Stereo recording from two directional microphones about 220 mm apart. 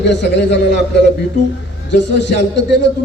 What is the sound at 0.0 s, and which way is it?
Speech, 50° left (ahead or behind).